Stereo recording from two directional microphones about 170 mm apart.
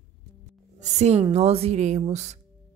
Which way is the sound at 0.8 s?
40° right (ahead or behind).